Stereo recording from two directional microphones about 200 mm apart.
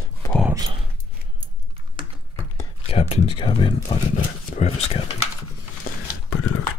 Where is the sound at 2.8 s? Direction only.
30° left (ahead or behind).